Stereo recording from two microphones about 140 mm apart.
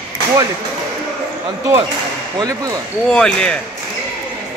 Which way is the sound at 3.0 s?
5° left (ahead or behind).